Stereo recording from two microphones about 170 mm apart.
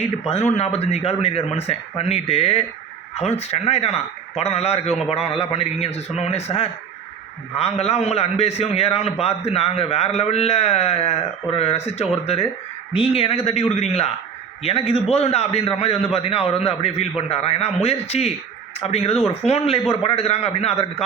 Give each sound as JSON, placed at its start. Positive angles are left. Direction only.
{"t": 0.0, "sound": "a man's voice", "side_deg": 40}